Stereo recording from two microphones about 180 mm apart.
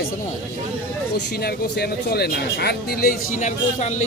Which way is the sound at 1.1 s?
70° left (ahead or behind).